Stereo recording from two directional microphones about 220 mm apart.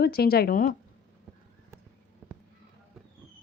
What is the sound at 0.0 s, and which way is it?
Speech, 45° left (ahead or behind).